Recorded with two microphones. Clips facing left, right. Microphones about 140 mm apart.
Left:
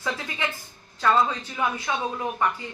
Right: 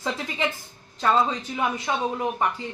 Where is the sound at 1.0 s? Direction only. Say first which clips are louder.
Even; 25° right (ahead or behind).